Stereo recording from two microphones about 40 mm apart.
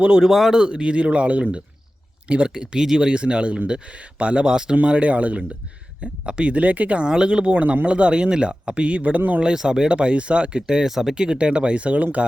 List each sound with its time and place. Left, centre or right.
0.2 s speech: centre
0.5 s speech: right
3.1 s speech: right
7.0 s speech: right
9.4 s speech: centre
10.8 s speech: centre
11.1 s speech: right